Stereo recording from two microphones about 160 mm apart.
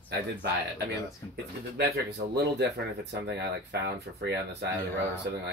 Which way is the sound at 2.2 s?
90° right.